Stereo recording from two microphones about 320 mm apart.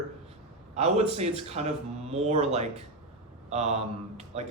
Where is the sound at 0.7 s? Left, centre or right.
Centre.